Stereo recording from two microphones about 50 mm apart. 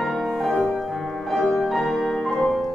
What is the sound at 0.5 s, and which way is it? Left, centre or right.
Music, centre.